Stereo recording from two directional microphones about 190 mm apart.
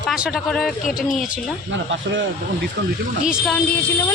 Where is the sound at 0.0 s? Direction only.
Centre (ahead or behind).